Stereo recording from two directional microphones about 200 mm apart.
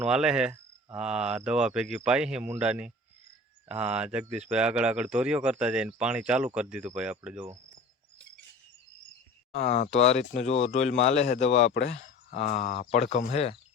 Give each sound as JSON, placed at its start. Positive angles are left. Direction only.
{"t": 0.0, "sound": "speech", "side_deg": -5}
{"t": 9.5, "sound": "speech", "side_deg": 30}